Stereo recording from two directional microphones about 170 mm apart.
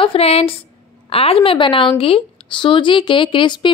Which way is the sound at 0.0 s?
35° left (ahead or behind).